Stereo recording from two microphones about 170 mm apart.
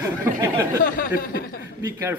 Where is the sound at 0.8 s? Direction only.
55° left (ahead or behind).